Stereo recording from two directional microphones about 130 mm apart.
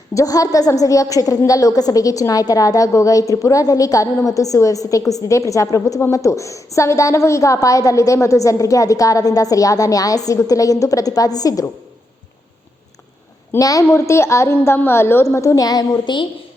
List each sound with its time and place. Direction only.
0.1 s a woman's voice: 25° left (ahead or behind)
13.6 s a woman's voice: 25° left (ahead or behind)